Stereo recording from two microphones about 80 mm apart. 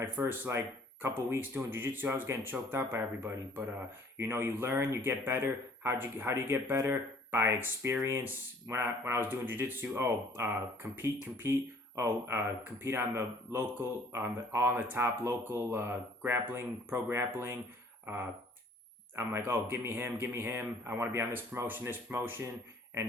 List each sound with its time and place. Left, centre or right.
0.0 s speech: right